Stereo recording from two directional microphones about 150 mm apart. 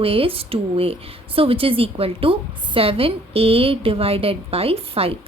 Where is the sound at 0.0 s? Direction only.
40° right (ahead or behind).